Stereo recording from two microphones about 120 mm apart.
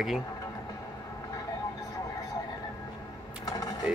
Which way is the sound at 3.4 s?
30° left (ahead or behind).